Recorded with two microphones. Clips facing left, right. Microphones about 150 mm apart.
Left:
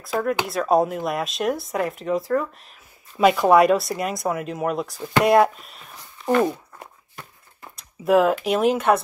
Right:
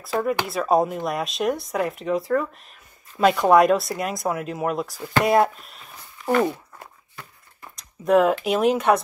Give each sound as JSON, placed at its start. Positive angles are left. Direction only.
{"t": 0.0, "sound": "speech", "side_deg": 0}
{"t": 6.8, "sound": "walk", "side_deg": 15}
{"t": 7.7, "sound": "speech", "side_deg": 5}